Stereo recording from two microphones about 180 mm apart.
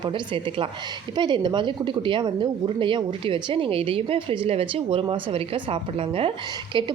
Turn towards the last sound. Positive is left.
turn(degrees=-25)  # may be behind; listen again after turning